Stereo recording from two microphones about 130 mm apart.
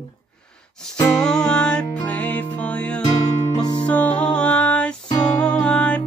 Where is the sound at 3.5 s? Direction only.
35° left (ahead or behind).